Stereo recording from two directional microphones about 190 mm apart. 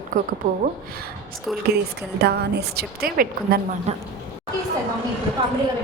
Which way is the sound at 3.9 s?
35° right (ahead or behind).